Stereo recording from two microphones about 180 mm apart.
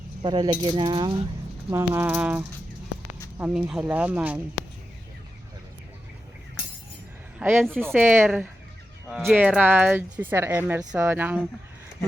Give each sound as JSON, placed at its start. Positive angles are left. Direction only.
{"t": 0.2, "sound": "speech", "side_deg": -25}
{"t": 1.7, "sound": "speech", "side_deg": -15}
{"t": 7.3, "sound": "a man's voice", "side_deg": -5}